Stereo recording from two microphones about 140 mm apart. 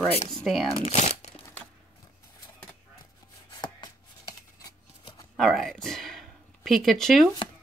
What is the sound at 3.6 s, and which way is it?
Chopping, 30° left (ahead or behind).